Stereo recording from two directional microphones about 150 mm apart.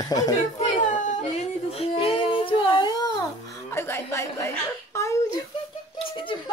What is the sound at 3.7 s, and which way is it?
Speech, 15° left (ahead or behind).